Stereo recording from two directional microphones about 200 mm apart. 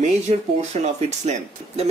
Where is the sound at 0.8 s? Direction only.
35° right (ahead or behind).